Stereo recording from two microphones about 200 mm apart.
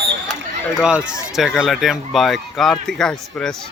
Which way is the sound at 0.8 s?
5° right (ahead or behind).